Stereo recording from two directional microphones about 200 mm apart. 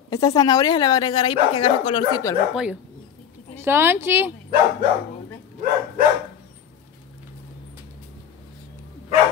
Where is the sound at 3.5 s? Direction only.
10° right (ahead or behind).